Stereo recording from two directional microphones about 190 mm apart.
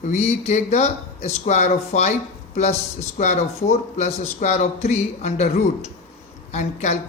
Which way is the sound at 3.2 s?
35° left (ahead or behind).